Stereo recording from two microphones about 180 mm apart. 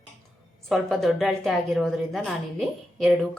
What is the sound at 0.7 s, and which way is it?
A woman's voice, centre (ahead or behind).